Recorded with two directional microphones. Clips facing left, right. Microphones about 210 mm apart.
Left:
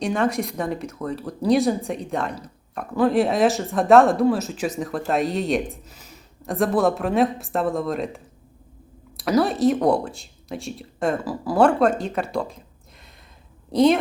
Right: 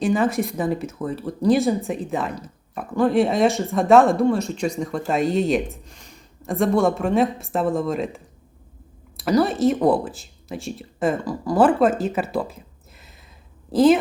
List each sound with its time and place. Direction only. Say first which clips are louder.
0.0 s speech: right 2 dB; centre (ahead or behind)
13.7 s a woman's voice: right 2 dB; 5° right (ahead or behind)